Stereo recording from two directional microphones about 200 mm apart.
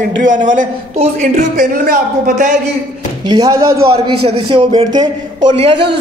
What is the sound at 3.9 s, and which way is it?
Speech, 90° right.